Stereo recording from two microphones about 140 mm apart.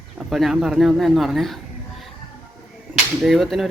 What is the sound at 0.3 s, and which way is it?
Speech, centre (ahead or behind).